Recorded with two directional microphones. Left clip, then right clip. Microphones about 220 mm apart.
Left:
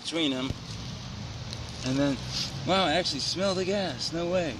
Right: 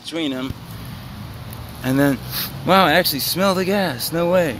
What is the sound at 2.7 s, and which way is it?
Speech, 50° right (ahead or behind).